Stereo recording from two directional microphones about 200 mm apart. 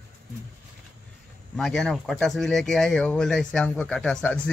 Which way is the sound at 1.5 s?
Centre (ahead or behind).